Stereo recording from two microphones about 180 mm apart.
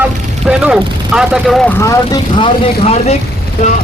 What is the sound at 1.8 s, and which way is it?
Speech, 20° left (ahead or behind).